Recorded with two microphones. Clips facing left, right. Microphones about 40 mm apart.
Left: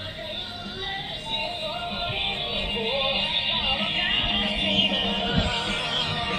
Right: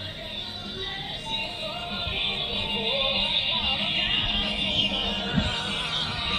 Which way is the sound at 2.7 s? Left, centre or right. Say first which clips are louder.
Left 1 dB; centre.